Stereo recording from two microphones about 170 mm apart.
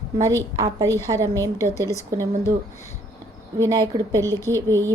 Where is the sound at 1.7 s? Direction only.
20° left (ahead or behind).